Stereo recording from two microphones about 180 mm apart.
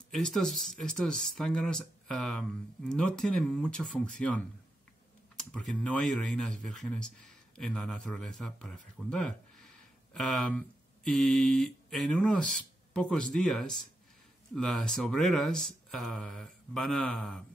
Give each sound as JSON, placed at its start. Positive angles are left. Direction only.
{"t": 0.1, "sound": "speech", "side_deg": 5}
{"t": 5.4, "sound": "speech", "side_deg": 5}